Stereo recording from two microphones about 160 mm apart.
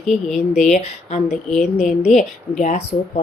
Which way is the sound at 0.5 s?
45° left (ahead or behind).